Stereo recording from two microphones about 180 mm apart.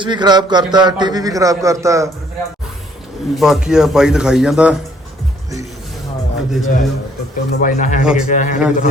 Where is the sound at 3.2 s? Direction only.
Centre (ahead or behind).